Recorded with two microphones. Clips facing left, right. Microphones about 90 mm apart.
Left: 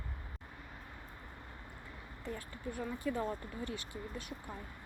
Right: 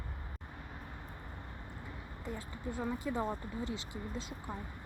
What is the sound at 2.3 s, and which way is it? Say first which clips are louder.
Speech: right 1 dB; 20° right (ahead or behind).